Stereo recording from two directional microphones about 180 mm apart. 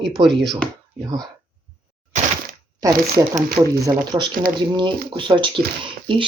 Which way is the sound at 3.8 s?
20° right (ahead or behind).